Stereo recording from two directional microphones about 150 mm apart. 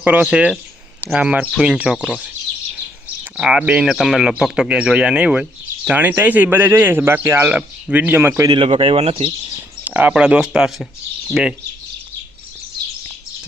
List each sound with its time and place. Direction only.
0.0 s speech: 10° right (ahead or behind)
3.3 s speech: 5° right (ahead or behind)
8.4 s speech: 35° right (ahead or behind)
9.8 s speech: 10° right (ahead or behind)